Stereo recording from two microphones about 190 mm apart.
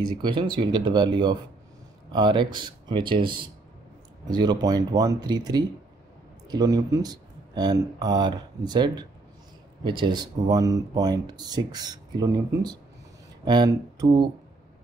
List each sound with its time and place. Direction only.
0.2 s speech: 25° right (ahead or behind)